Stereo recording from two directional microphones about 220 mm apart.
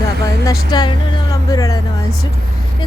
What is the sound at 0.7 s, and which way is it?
A woman's voice, 20° left (ahead or behind).